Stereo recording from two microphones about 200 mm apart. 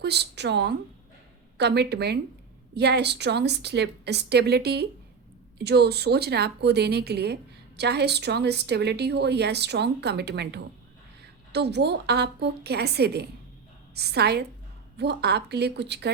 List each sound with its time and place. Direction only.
0.0 s a woman's voice: 55° right (ahead or behind)